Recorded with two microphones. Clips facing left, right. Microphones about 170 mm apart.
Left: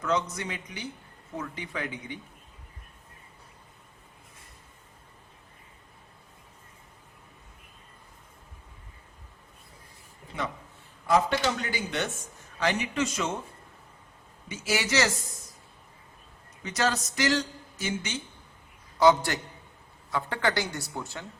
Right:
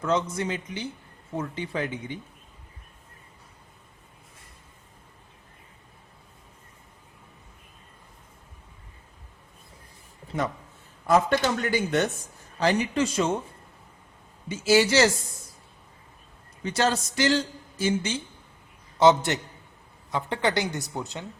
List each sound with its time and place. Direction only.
0.0 s a man's voice: 30° right (ahead or behind)
11.1 s a man's voice: 50° right (ahead or behind); by 13.3 s 35° right (ahead or behind)
14.4 s a man's voice: 30° right (ahead or behind)
16.6 s a man's voice: 30° right (ahead or behind)